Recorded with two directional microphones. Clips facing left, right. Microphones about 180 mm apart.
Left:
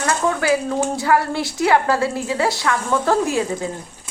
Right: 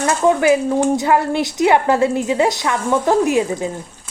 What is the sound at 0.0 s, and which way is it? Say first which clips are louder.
Speech: right 5 dB; 20° right (ahead or behind).